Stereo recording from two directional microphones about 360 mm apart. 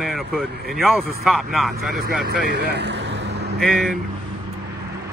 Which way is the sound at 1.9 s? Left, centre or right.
Right.